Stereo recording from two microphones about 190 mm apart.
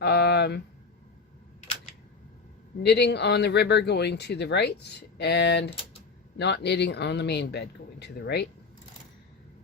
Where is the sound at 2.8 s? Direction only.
60° left (ahead or behind).